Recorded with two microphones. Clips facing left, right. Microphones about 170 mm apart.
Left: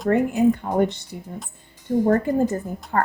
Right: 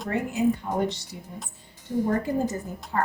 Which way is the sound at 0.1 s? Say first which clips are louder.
Left 6 dB; 55° left (ahead or behind).